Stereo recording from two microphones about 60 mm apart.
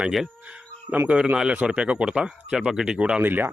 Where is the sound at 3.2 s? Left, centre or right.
Right.